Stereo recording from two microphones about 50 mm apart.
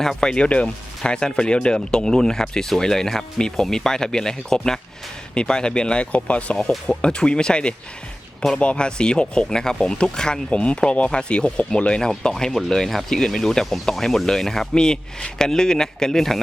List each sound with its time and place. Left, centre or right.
0.0 s speech: centre